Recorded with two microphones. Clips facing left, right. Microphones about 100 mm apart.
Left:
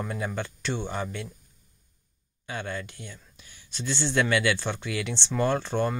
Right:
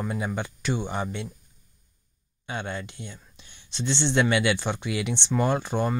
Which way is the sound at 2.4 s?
20° right (ahead or behind).